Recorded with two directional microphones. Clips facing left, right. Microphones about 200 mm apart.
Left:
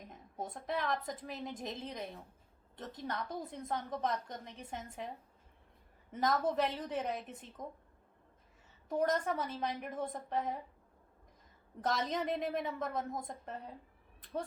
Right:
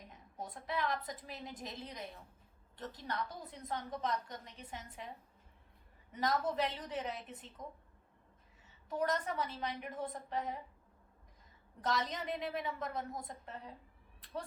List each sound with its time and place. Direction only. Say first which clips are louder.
0.3 s a woman's voice: left 2 dB; 50° left (ahead or behind)
6.1 s a woman's voice: left 2 dB; 50° left (ahead or behind)
8.9 s a woman's voice: left 3 dB; 50° left (ahead or behind)
11.8 s a woman's voice: left 2 dB; 50° left (ahead or behind)